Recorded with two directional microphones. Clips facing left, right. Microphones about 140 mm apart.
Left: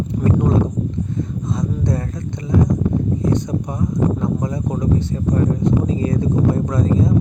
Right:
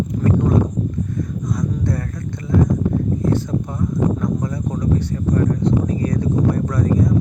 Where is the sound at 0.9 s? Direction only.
25° left (ahead or behind).